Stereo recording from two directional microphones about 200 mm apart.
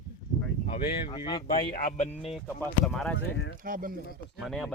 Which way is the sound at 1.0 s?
25° left (ahead or behind).